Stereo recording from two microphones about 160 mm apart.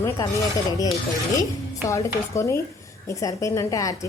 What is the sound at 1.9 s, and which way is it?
A woman's voice, 20° left (ahead or behind).